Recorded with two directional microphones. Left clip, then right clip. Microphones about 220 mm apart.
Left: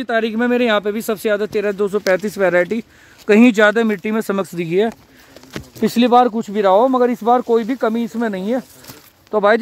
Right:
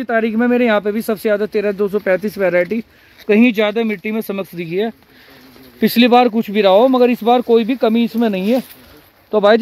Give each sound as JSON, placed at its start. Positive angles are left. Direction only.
{"t": 0.0, "sound": "speech", "side_deg": 0}
{"t": 5.8, "sound": "speech", "side_deg": 0}